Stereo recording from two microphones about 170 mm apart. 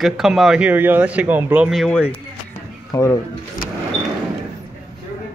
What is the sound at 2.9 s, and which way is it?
Speech, 20° left (ahead or behind).